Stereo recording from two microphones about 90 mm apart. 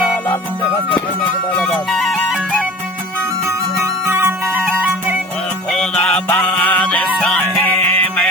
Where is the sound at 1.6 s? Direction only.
5° left (ahead or behind).